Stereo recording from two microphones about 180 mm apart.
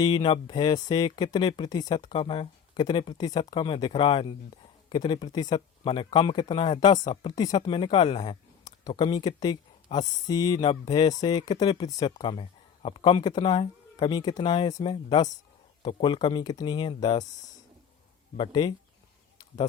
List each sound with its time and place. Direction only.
0.0 s speech: 25° left (ahead or behind)
18.3 s speech: 25° left (ahead or behind)